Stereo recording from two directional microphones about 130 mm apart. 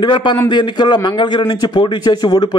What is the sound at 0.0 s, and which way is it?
A man's voice, 35° left (ahead or behind).